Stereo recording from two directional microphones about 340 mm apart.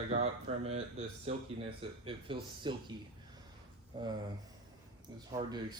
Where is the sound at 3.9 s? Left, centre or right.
Centre.